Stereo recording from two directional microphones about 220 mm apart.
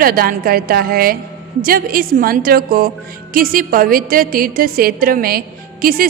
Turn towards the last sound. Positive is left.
turn(degrees=-40)  # may be behind; listen again after turning